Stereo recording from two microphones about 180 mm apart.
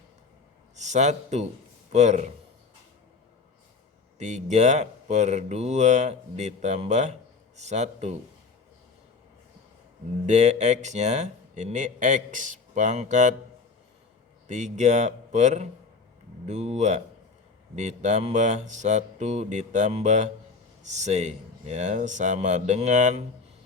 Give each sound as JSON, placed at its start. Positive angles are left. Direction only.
{"t": 0.8, "sound": "speech", "side_deg": -40}
{"t": 4.2, "sound": "speech", "side_deg": -40}
{"t": 10.2, "sound": "speech", "side_deg": -40}
{"t": 14.4, "sound": "speech", "side_deg": -40}